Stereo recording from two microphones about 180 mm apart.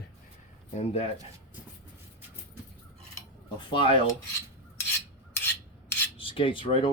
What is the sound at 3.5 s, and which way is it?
Speech, 25° left (ahead or behind).